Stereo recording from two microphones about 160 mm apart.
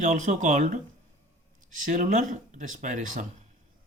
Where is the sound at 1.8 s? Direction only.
55° right (ahead or behind).